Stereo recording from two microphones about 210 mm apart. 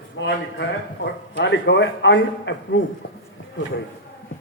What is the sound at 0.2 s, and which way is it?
A man's voice, 60° left (ahead or behind).